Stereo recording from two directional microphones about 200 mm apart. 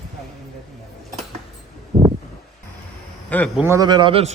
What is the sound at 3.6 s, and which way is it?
Speech, 15° right (ahead or behind).